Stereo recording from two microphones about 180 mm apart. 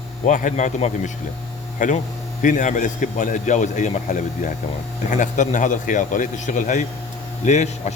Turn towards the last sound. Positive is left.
turn(degrees=40)  # may be behind; listen again after turning